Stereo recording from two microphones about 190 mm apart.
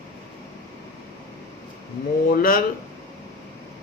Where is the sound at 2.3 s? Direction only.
50° left (ahead or behind).